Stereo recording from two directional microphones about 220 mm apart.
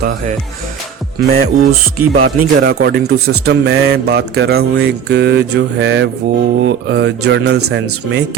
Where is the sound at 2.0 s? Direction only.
80° right.